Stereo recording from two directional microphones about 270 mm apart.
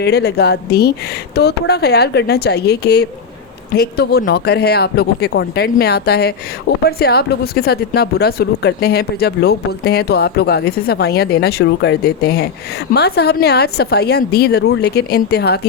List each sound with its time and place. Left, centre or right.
0.0 s speech: left